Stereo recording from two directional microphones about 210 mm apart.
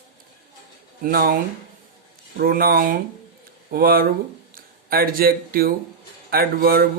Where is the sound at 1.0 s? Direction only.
45° right (ahead or behind).